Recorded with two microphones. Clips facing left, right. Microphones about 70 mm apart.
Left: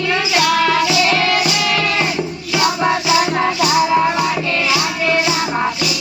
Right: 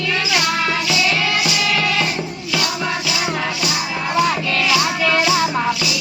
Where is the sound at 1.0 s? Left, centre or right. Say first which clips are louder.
Left 4 dB; left.